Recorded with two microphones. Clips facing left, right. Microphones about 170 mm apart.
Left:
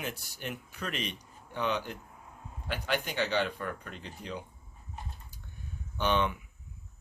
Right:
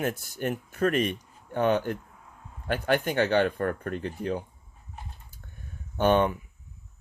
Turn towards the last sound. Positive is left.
turn(degrees=-50)  # may be behind; listen again after turning